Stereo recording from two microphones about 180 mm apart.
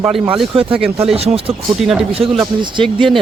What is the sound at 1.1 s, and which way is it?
Speech, 35° right (ahead or behind).